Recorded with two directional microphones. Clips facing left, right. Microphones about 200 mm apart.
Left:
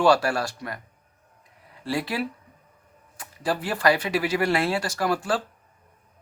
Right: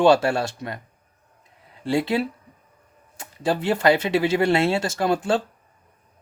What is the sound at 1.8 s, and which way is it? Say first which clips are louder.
Speech: right 5 dB; 25° right (ahead or behind).